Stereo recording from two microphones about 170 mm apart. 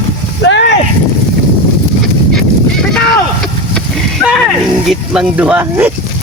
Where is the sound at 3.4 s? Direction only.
Centre (ahead or behind).